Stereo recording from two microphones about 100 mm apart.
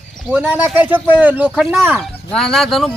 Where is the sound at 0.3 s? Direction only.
15° right (ahead or behind).